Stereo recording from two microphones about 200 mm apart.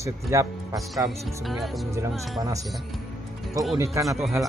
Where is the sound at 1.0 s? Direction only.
Centre (ahead or behind).